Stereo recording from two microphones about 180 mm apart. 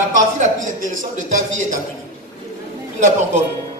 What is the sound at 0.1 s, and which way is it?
A man's voice, 45° right (ahead or behind).